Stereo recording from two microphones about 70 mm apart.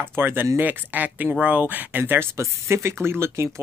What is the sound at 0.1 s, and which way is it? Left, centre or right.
Speech, right.